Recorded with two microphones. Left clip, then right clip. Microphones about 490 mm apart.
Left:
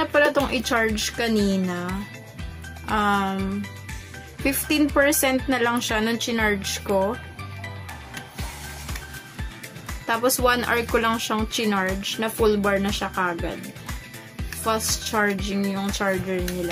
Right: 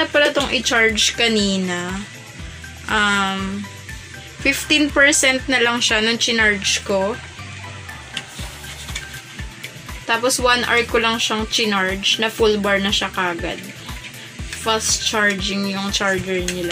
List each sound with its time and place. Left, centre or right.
0.0 s a woman's voice: left
2.9 s a woman's voice: left
4.4 s a woman's voice: left
10.0 s a woman's voice: left
14.6 s a woman's voice: left